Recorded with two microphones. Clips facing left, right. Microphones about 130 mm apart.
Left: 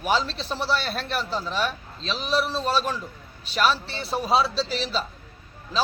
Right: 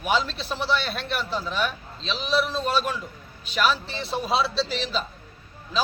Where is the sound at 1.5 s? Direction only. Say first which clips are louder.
Even; 35° left (ahead or behind).